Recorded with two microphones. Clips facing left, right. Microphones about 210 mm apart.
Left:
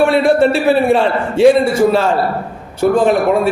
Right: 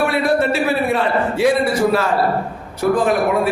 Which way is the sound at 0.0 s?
25° left (ahead or behind).